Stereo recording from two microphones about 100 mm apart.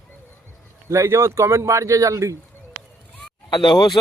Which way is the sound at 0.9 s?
30° right (ahead or behind).